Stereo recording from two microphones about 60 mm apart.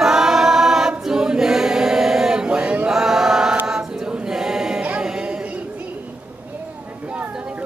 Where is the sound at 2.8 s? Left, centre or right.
Centre.